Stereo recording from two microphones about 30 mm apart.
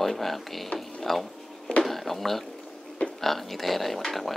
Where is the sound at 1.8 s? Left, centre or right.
Centre.